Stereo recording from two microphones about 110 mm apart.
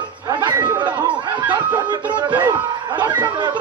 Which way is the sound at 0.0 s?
45° right (ahead or behind).